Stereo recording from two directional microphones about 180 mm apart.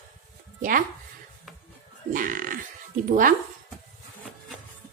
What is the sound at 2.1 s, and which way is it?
A woman's voice, 50° right (ahead or behind).